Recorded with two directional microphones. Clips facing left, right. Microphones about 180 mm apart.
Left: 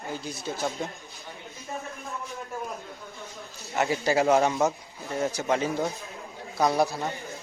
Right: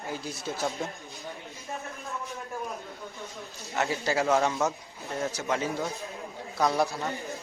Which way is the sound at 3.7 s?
15° left (ahead or behind).